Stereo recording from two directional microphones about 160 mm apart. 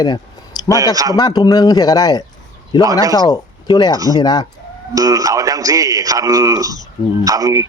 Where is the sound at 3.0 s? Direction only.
20° right (ahead or behind).